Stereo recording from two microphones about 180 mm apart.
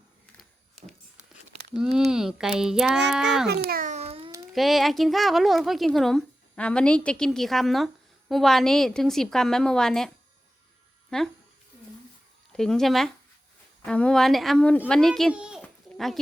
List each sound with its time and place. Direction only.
0.3 s a sound: 5° left (ahead or behind)
1.7 s a woman's voice: centre (ahead or behind)
3.7 s a sound: 45° right (ahead or behind)
4.5 s a woman's voice: centre (ahead or behind)
11.1 s a woman's voice: 5° left (ahead or behind)
12.5 s a woman's voice: 5° left (ahead or behind)